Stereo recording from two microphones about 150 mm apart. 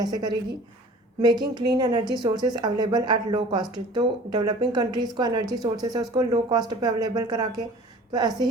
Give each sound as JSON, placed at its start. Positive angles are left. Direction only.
{"t": 0.0, "sound": "a woman's voice", "side_deg": -30}